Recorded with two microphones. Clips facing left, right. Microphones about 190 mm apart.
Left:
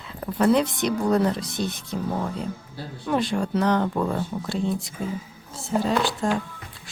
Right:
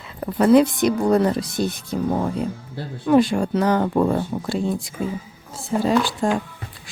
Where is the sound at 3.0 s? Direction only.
10° right (ahead or behind).